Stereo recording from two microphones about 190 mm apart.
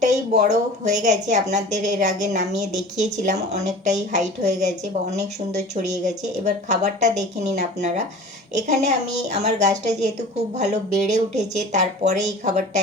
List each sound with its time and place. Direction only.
0.0 s a woman's voice: 40° right (ahead or behind)